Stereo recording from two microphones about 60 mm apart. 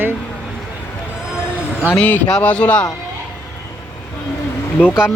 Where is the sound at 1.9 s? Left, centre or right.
Left.